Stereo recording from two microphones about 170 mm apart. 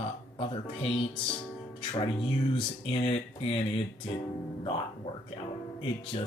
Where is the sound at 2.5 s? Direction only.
35° left (ahead or behind).